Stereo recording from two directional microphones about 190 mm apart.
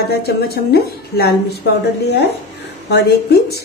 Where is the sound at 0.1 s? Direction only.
55° left (ahead or behind).